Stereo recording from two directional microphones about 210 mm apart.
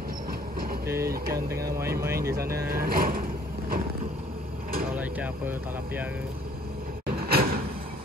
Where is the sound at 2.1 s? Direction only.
45° right (ahead or behind).